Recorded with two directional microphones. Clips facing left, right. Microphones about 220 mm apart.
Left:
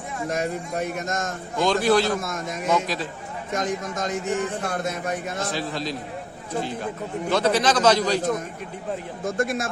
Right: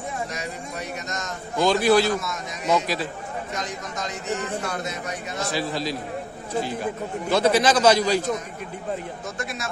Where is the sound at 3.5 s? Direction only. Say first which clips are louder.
Left 5 dB; 50° left (ahead or behind).